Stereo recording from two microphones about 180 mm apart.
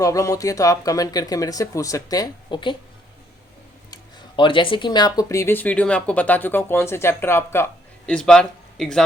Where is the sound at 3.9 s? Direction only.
25° left (ahead or behind).